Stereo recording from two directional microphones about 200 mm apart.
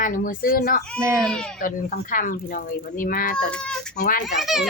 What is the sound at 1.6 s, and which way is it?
Speech, 45° left (ahead or behind).